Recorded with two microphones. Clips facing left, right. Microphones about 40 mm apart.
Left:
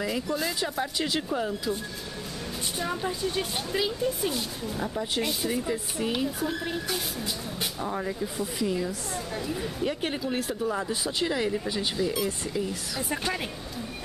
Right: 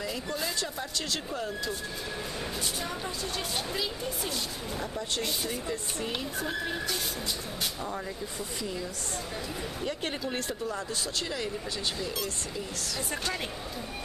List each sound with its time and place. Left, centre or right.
0.6 s speech: centre
2.8 s speech: centre
10.7 s speech: centre